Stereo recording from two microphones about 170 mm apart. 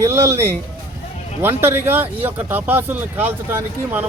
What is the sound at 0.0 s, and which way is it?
Speech, 15° right (ahead or behind).